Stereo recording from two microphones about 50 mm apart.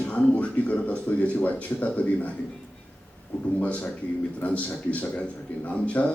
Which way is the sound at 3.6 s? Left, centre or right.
Left.